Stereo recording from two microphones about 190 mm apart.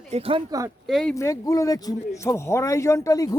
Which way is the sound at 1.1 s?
15° left (ahead or behind).